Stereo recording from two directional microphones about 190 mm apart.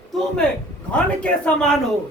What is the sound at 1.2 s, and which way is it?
Speech, 5° left (ahead or behind).